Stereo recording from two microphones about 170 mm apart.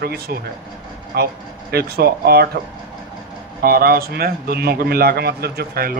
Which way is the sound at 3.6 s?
60° right (ahead or behind).